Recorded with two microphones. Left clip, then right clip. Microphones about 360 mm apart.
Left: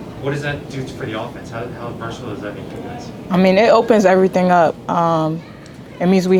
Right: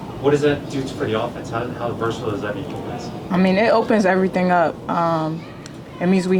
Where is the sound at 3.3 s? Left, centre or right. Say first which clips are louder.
Left 5 dB; left.